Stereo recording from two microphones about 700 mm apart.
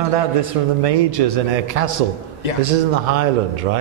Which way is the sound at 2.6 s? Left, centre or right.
Right.